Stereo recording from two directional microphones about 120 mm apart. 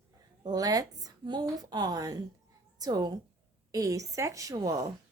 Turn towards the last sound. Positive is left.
turn(degrees=-30)  # may be behind; listen again after turning